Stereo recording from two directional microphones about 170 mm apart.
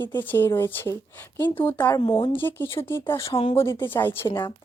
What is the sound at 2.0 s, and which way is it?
Speech, 30° left (ahead or behind).